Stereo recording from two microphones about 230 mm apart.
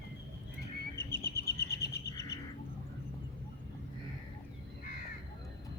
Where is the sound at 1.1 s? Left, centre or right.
Left.